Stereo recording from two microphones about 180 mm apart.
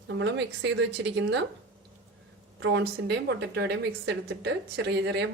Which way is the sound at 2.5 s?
75° right (ahead or behind).